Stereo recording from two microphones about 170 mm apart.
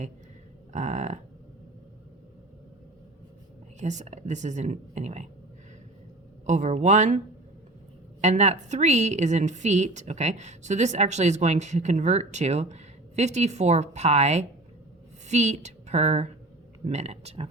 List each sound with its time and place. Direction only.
0.7 s a woman's voice: 45° right (ahead or behind)
3.8 s a woman's voice: 45° right (ahead or behind)
6.4 s a woman's voice: 45° right (ahead or behind)
8.2 s a woman's voice: 40° right (ahead or behind)